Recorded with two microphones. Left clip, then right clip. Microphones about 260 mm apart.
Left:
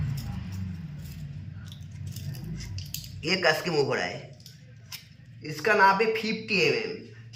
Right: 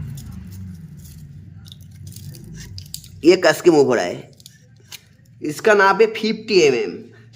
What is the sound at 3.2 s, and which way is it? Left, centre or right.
Speech, right.